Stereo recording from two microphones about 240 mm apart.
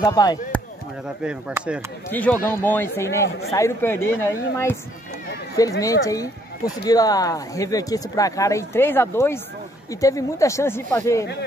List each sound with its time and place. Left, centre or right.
0.0 s speech: centre
1.2 s speech: centre
2.0 s speech: centre